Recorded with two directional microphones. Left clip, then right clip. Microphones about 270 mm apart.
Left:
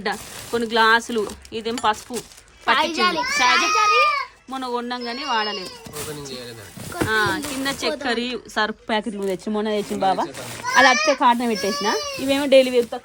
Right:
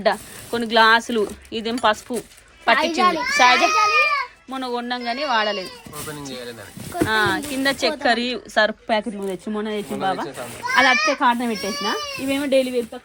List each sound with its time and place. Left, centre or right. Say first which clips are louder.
0.0 s a child's voice: right 6 dB; centre
6.9 s speech: right 1 dB; centre; by 9.8 s left
10.0 s speech: left 3 dB; centre
11.0 s speech: left 1 dB; left